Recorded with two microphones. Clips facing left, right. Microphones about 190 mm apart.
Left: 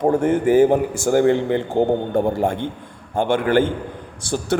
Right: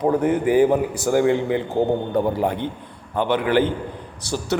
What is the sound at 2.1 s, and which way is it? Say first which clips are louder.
A man's voice: left 1 dB; 45° left (ahead or behind).